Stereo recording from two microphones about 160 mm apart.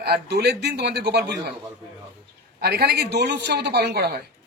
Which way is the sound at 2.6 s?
80° right.